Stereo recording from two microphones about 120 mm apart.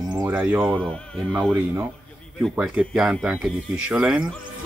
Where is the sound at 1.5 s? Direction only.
15° right (ahead or behind).